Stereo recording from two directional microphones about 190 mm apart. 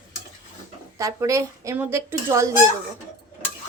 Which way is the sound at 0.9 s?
15° right (ahead or behind).